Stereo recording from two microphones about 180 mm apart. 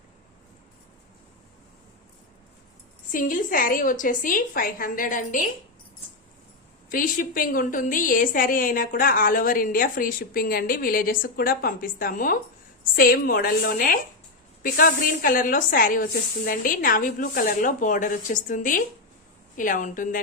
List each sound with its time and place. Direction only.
3.1 s a woman's voice: 50° left (ahead or behind)
6.9 s a woman's voice: 50° left (ahead or behind)